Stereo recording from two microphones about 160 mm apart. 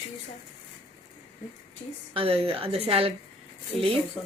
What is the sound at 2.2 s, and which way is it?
Speech, 35° right (ahead or behind).